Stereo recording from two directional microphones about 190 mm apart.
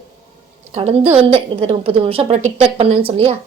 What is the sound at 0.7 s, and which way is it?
Speech, 35° right (ahead or behind).